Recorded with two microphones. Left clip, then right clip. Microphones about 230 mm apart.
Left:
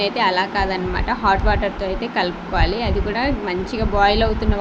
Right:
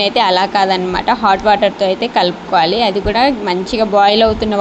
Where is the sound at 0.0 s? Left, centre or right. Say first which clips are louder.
Right 6 dB; right.